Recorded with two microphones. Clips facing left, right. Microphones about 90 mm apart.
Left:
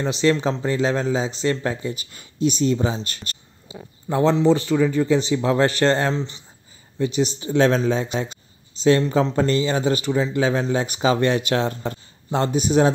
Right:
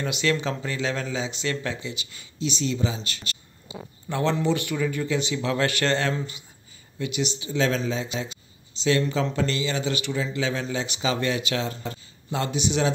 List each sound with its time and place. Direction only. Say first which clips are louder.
0.0 s speech: left 6 dB; 30° left (ahead or behind)
4.1 s a man's voice: left 7 dB; 30° left (ahead or behind)